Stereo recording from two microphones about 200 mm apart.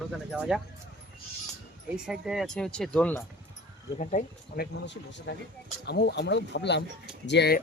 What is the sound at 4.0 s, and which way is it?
Speech, 40° left (ahead or behind).